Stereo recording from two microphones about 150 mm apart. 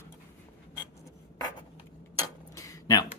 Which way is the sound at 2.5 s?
25° left (ahead or behind).